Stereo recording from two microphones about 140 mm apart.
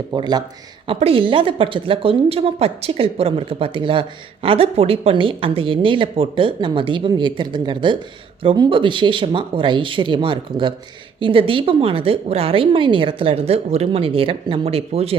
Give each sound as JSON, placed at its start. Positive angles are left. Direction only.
{"t": 0.1, "sound": "speech", "side_deg": -30}
{"t": 0.9, "sound": "a woman's voice", "side_deg": -45}